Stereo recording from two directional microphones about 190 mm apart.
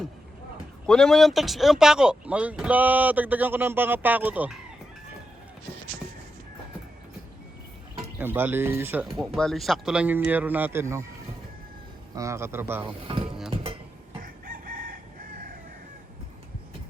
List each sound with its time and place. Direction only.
0.9 s speech: 5° left (ahead or behind)
8.2 s speech: 10° right (ahead or behind)
9.0 s speech: centre (ahead or behind)
12.1 s speech: 15° right (ahead or behind)
13.2 s a sound: 5° right (ahead or behind)
14.2 s chicken: 50° right (ahead or behind)